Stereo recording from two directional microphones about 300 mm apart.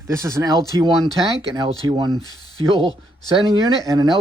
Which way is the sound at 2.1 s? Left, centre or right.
Centre.